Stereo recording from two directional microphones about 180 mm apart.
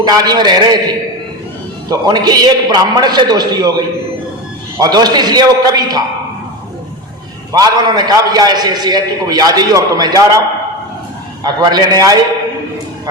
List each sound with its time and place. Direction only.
0.0 s a man's voice: 20° right (ahead or behind)
1.9 s a man's voice: 20° right (ahead or behind)
7.5 s a man's voice: 20° right (ahead or behind)
11.4 s a man's voice: 20° right (ahead or behind)